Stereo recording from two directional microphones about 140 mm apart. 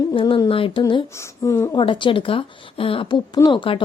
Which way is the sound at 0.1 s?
40° left (ahead or behind).